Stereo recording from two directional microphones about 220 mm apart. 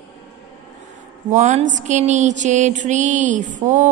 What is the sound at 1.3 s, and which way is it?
A woman's voice, 30° right (ahead or behind).